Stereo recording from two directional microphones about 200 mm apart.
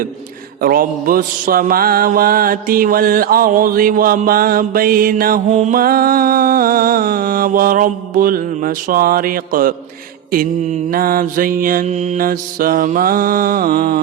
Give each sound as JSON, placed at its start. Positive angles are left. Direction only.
{"t": 0.6, "sound": "mantra", "side_deg": -45}